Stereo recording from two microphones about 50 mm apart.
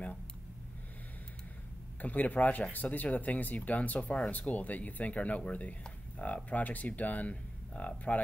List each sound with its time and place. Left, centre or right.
2.0 s speech: left